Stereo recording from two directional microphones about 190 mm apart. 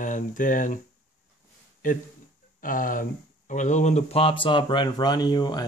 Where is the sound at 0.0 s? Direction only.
45° left (ahead or behind).